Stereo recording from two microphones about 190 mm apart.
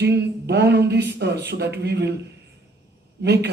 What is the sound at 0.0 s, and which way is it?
A woman's voice, 60° right (ahead or behind).